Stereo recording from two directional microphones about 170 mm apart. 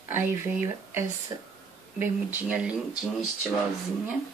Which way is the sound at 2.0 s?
10° right (ahead or behind).